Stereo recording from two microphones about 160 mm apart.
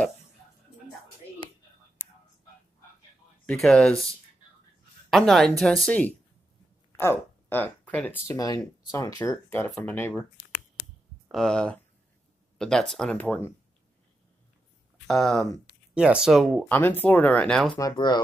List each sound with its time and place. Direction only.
3.4 s speech: 5° left (ahead or behind)
11.3 s speech: 5° left (ahead or behind)
15.0 s speech: centre (ahead or behind)
16.6 s speech: 10° left (ahead or behind)
17.7 s speech: 25° left (ahead or behind)